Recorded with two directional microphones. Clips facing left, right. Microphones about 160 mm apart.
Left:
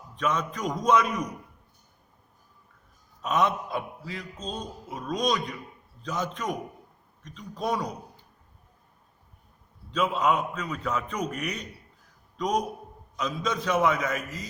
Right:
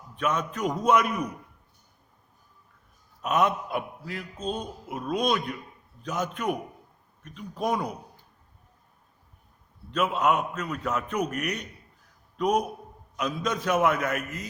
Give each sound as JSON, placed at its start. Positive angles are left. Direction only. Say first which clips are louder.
{"t": 0.2, "sound": "a man's voice", "louder": "right 1 dB", "side_deg": -5}
{"t": 3.2, "sound": "a man's voice", "louder": "right 1 dB", "side_deg": -5}
{"t": 9.9, "sound": "a man's voice", "louder": "right 1 dB", "side_deg": -5}
{"t": 14.2, "sound": "a man's voice", "louder": "right 2 dB", "side_deg": -55}